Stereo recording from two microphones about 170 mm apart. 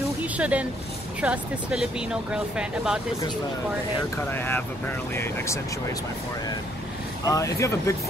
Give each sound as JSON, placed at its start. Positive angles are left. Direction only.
{"t": 0.2, "sound": "a sound", "side_deg": -10}
{"t": 1.2, "sound": "speech", "side_deg": -5}
{"t": 4.3, "sound": "speech", "side_deg": 15}
{"t": 7.2, "sound": "speech", "side_deg": 20}